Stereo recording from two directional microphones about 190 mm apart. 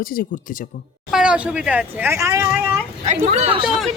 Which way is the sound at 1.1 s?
5° right (ahead or behind).